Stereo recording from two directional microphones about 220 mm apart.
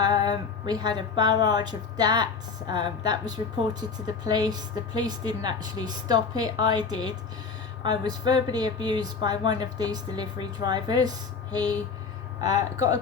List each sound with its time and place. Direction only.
0.0 s a woman's voice: 20° right (ahead or behind)
7.9 s a woman's voice: 20° right (ahead or behind)
12.4 s speech: 15° right (ahead or behind)